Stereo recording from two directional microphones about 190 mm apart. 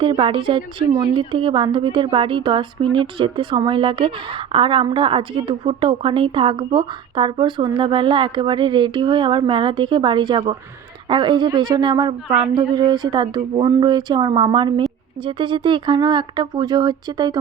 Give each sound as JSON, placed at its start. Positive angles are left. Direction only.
{"t": 0.0, "sound": "a woman's voice", "side_deg": -25}